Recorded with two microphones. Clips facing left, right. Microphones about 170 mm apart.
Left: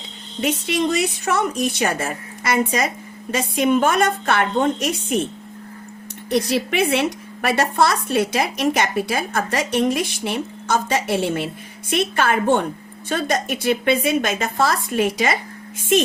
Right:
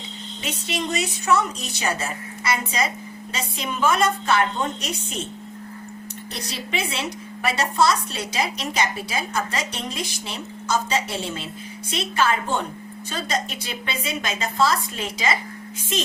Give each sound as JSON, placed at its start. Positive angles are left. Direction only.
{"t": 0.4, "sound": "a woman's voice", "side_deg": 55}
{"t": 3.3, "sound": "a woman's voice", "side_deg": 55}
{"t": 6.3, "sound": "a woman's voice", "side_deg": 60}